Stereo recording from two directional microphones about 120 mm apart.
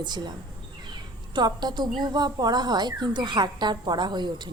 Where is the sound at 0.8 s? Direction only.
40° right (ahead or behind).